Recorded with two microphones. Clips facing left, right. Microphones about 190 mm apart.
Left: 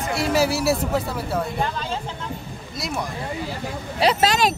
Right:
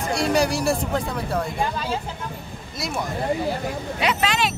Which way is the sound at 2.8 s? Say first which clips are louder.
Even; centre (ahead or behind).